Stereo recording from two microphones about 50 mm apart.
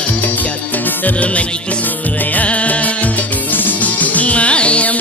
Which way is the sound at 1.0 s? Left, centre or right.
Left.